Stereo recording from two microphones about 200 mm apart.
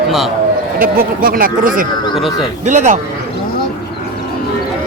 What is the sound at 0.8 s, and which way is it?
Speech, 45° right (ahead or behind).